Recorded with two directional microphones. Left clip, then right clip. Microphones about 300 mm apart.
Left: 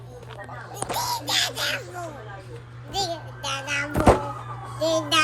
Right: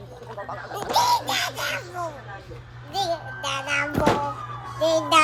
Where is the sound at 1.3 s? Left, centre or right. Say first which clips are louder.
Left 1 dB; centre.